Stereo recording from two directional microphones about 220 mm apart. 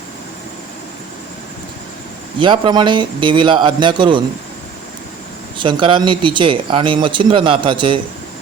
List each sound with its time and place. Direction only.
2.4 s speech: 20° right (ahead or behind)
5.5 s speech: 20° right (ahead or behind)